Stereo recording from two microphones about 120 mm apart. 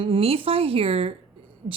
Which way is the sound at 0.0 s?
50° right (ahead or behind).